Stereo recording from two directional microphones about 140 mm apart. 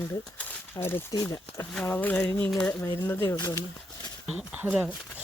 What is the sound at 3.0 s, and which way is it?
Speech, 15° left (ahead or behind).